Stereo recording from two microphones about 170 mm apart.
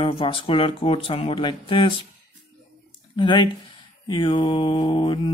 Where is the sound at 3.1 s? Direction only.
30° left (ahead or behind).